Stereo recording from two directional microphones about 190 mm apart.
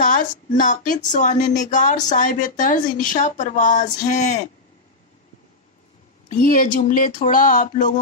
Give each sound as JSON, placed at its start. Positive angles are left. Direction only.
{"t": 0.0, "sound": "speech", "side_deg": 45}
{"t": 6.3, "sound": "speech", "side_deg": 45}